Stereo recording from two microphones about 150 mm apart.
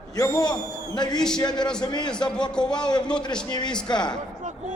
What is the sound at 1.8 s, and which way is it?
Speech, 30° left (ahead or behind).